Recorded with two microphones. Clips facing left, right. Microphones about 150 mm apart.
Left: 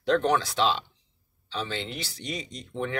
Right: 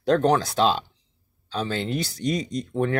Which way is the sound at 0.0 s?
40° right (ahead or behind).